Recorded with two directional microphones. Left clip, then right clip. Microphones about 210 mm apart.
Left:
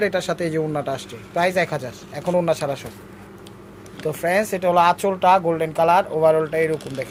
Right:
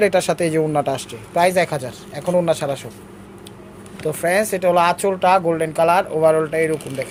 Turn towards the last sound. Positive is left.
turn(degrees=0)  # may be behind; listen again after turning